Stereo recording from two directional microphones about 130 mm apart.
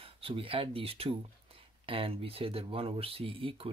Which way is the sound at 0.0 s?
45° right (ahead or behind).